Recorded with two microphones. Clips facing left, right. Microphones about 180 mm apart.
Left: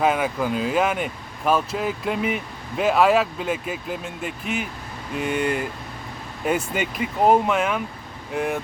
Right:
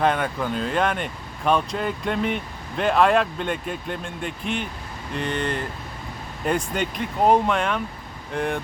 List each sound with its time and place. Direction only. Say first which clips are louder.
0.0 s speech: left 1 dB; 5° left (ahead or behind)